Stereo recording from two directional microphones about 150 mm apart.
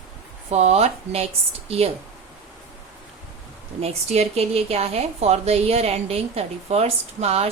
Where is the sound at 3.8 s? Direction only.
45° right (ahead or behind).